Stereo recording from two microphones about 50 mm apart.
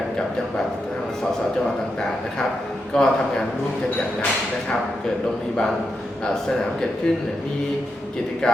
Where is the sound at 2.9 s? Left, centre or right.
Centre.